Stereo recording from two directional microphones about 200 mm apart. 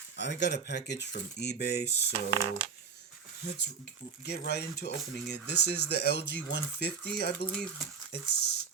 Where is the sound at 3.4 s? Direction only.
55° left (ahead or behind).